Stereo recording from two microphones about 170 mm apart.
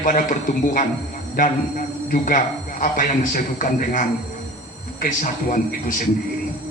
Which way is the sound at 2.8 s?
50° left (ahead or behind).